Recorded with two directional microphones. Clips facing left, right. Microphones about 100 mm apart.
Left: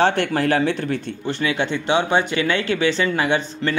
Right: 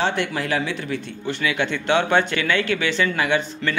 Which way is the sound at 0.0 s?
50° left (ahead or behind).